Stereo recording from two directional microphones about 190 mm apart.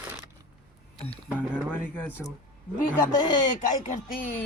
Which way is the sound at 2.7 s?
45° left (ahead or behind).